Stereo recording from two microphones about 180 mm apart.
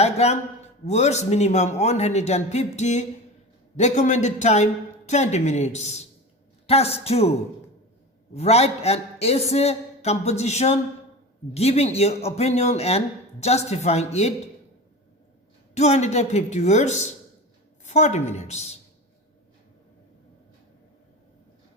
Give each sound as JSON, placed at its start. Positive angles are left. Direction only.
{"t": 0.0, "sound": "a man's voice", "side_deg": 35}
{"t": 15.7, "sound": "a man's voice", "side_deg": 40}